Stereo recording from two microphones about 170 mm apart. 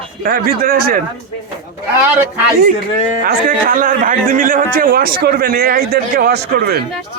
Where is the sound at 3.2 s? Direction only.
55° right (ahead or behind).